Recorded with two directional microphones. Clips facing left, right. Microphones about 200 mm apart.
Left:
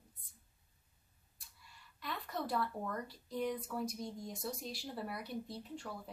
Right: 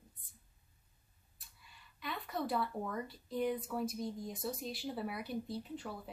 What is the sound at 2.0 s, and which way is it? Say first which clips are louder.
Speech: right 2 dB; centre (ahead or behind).